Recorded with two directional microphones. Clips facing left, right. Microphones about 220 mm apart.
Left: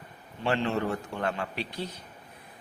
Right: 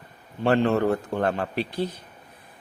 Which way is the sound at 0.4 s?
55° right (ahead or behind).